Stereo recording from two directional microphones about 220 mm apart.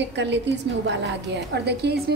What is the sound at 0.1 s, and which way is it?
A woman's voice, 55° right (ahead or behind).